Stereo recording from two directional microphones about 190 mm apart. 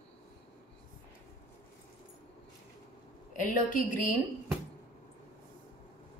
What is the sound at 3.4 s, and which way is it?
Speech, 45° left (ahead or behind).